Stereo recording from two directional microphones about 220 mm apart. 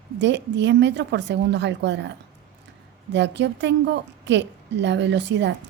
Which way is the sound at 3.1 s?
55° right (ahead or behind).